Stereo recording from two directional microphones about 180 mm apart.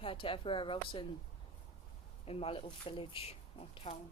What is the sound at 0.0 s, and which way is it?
Speech, 30° left (ahead or behind).